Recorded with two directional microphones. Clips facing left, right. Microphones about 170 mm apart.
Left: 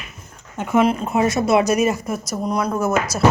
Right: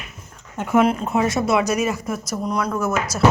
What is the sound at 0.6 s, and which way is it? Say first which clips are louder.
Speech: even; centre (ahead or behind).